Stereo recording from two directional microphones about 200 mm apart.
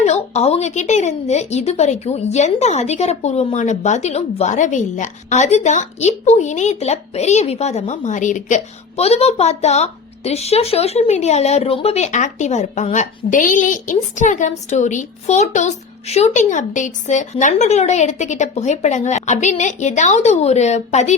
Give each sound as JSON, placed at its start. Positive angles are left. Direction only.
{"t": 0.0, "sound": "a woman's voice", "side_deg": 30}